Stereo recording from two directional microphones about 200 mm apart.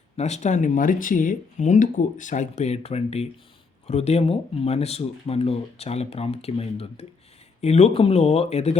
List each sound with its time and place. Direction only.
0.2 s speech: 35° left (ahead or behind)